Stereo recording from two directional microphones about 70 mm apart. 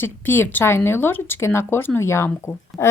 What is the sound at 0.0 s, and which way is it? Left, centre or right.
Speech, left.